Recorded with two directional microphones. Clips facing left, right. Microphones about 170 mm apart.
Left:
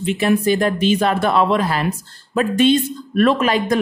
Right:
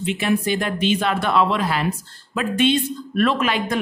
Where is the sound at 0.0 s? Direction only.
45° left (ahead or behind).